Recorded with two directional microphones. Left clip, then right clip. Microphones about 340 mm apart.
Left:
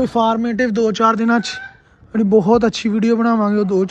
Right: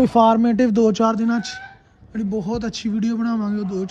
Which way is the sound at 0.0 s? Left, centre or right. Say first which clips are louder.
Right 2 dB; centre.